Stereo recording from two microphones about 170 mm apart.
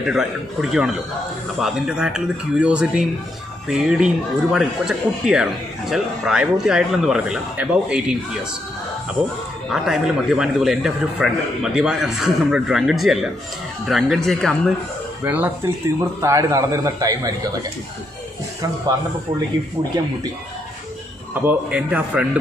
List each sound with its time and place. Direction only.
0.0 s speech: 5° right (ahead or behind)
9.7 s speech: 5° right (ahead or behind)
15.2 s a man's voice: 10° right (ahead or behind)
21.4 s a man's voice: 10° right (ahead or behind)